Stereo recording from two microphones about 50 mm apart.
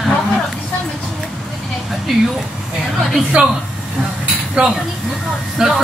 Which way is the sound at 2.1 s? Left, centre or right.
Centre.